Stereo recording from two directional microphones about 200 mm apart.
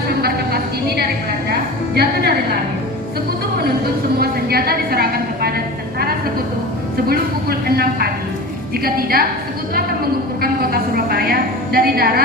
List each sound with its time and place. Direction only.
0.1 s speech: 50° right (ahead or behind)
4.2 s a woman's voice: 50° right (ahead or behind)
10.4 s a sound: 50° right (ahead or behind)